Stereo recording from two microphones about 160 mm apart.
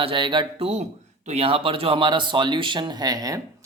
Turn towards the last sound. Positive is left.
turn(degrees=-25)  # may be behind; listen again after turning